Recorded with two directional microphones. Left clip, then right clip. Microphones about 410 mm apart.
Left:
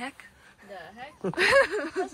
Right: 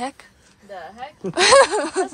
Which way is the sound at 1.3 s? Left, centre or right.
Centre.